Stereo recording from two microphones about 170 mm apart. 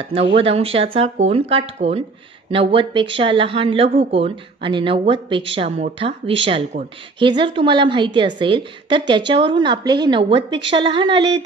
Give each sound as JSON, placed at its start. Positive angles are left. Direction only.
{"t": 0.1, "sound": "a woman's voice", "side_deg": -35}